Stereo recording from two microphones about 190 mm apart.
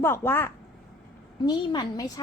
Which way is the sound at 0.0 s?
10° left (ahead or behind).